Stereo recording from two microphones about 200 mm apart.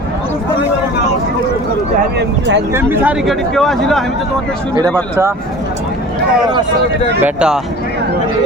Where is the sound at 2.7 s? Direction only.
10° right (ahead or behind).